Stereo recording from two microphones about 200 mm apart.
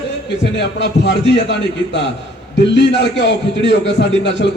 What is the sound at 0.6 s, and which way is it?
A man's voice, 60° left (ahead or behind).